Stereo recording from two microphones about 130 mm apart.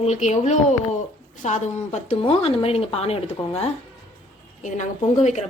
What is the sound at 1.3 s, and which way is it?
A woman's voice, 70° left (ahead or behind).